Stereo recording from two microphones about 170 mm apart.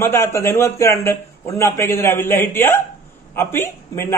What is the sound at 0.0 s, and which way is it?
A man's voice, 15° left (ahead or behind).